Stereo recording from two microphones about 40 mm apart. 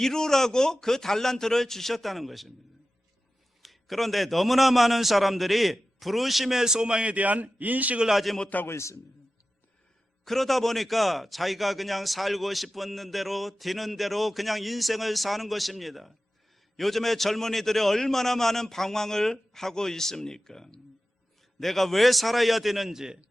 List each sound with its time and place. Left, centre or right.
0.0 s a man's voice: centre
3.6 s speech: centre; by 7.9 s right
8.1 s speech: centre
8.6 s a man's voice: left
10.2 s a man's voice: centre